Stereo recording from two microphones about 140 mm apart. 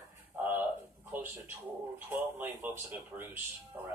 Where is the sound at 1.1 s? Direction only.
15° right (ahead or behind).